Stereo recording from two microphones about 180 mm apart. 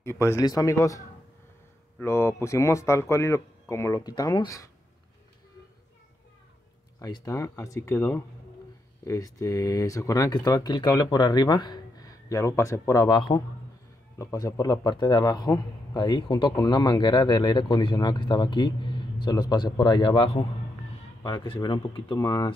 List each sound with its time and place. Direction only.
0.0 s speech: 15° left (ahead or behind)
7.0 s speech: 20° left (ahead or behind)